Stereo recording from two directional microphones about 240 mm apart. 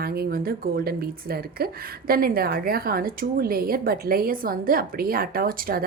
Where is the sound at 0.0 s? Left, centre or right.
Right.